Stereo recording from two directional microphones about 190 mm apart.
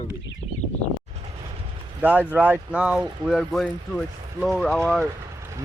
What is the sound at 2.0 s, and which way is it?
Speech, 10° right (ahead or behind).